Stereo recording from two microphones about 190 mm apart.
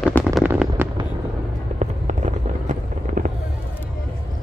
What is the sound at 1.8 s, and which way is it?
Fireworks, 40° right (ahead or behind).